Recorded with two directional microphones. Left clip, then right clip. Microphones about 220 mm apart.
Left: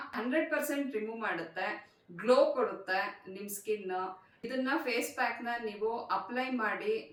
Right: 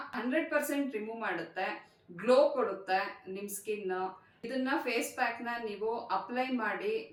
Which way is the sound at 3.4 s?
Centre (ahead or behind).